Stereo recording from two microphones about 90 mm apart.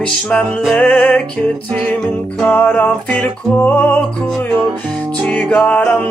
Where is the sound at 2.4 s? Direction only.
15° left (ahead or behind).